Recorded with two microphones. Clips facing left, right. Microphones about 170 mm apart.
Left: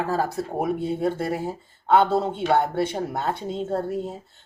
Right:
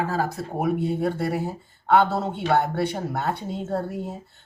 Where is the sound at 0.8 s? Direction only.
25° left (ahead or behind).